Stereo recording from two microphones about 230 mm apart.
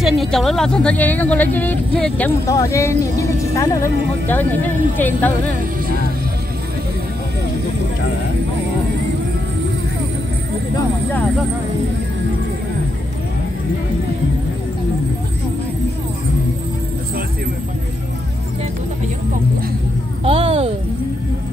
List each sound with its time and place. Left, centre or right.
0.0 s speech: centre
20.2 s a child's voice: right